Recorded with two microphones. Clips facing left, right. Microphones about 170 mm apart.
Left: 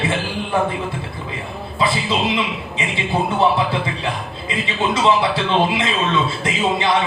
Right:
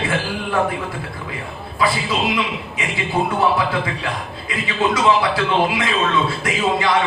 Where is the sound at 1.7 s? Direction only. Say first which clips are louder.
Even; 25° left (ahead or behind).